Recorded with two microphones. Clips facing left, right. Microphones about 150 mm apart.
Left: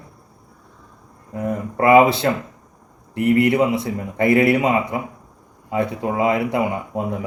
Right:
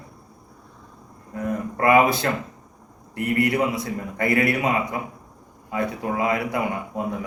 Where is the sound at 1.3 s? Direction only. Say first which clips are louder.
Left 2 dB; 20° left (ahead or behind).